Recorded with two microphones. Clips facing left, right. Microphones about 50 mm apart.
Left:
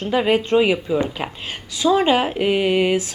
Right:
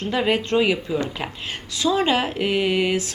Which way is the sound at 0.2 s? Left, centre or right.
Centre.